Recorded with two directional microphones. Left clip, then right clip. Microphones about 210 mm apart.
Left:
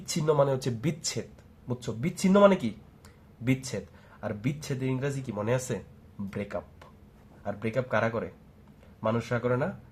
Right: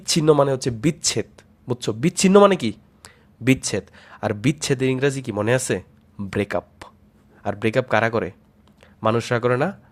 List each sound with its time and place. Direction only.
0.0 s speech: 45° right (ahead or behind)